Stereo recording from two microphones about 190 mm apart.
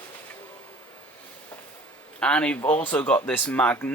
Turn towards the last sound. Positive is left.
turn(degrees=10)  # may be behind; listen again after turning